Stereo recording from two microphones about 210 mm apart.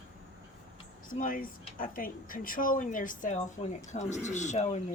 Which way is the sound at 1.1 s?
40° left (ahead or behind).